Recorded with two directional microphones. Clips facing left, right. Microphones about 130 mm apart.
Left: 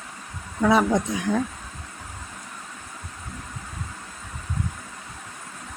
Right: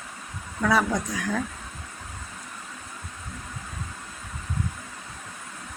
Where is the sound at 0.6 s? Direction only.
25° left (ahead or behind).